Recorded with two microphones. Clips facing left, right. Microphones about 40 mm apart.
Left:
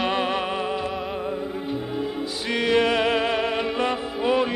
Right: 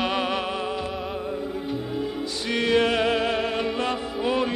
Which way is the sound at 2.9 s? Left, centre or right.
Centre.